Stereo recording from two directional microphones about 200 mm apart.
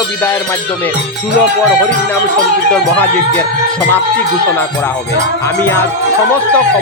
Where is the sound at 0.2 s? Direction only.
10° left (ahead or behind).